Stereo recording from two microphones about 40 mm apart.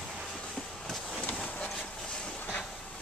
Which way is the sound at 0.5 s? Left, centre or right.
Centre.